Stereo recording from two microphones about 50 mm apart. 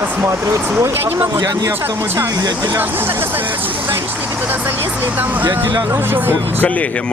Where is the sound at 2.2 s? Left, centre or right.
Right.